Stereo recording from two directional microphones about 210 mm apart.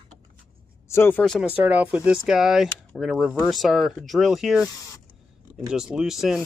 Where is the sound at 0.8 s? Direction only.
10° left (ahead or behind).